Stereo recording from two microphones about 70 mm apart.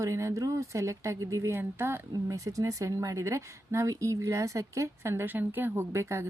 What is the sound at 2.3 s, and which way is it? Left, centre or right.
Speech, right.